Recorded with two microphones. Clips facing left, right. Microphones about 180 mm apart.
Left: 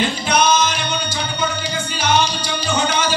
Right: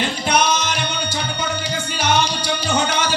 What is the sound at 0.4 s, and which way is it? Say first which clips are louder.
Music: left 6 dB; 65° right (ahead or behind).